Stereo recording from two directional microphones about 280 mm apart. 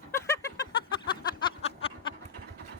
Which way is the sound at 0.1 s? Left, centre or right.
Centre.